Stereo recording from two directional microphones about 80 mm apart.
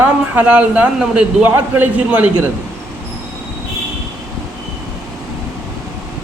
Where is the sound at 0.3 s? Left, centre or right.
Centre.